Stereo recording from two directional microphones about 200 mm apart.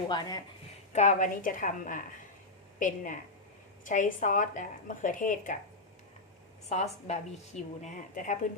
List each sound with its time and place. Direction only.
0.1 s speech: 20° left (ahead or behind)
0.9 s a woman's voice: 40° left (ahead or behind)
6.7 s speech: 35° left (ahead or behind)